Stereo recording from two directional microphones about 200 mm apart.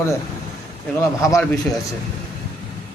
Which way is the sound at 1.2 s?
15° left (ahead or behind).